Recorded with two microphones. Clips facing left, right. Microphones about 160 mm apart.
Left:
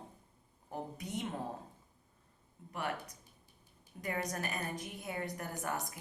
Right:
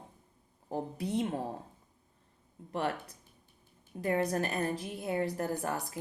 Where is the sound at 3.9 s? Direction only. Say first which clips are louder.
Right 8 dB; 40° right (ahead or behind).